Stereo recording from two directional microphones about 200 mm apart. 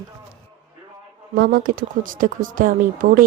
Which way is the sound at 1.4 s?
50° right (ahead or behind).